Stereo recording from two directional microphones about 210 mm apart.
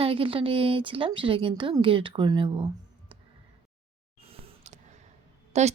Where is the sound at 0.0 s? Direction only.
25° right (ahead or behind).